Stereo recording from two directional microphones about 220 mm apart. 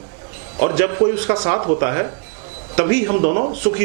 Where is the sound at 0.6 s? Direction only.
10° right (ahead or behind).